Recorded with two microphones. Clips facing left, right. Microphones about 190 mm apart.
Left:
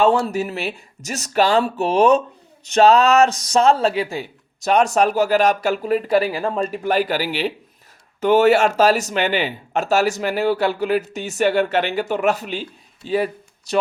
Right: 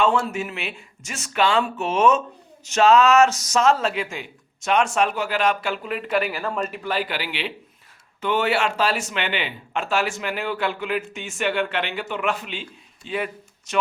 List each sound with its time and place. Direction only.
0.0 s speech: 35° left (ahead or behind)
6.8 s speech: 45° left (ahead or behind)